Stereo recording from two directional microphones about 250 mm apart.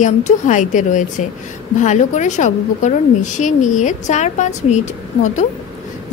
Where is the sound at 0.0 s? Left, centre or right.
Left.